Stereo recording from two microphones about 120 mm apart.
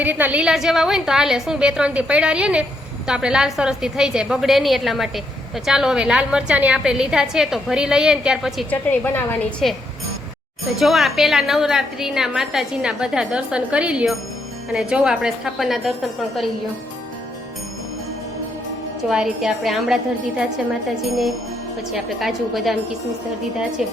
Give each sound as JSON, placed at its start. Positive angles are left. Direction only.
{"t": 0.0, "sound": "a woman's voice", "side_deg": -15}
{"t": 8.7, "sound": "a woman's voice", "side_deg": 15}
{"t": 9.6, "sound": "a woman's voice", "side_deg": 0}
{"t": 19.0, "sound": "a woman's voice", "side_deg": -5}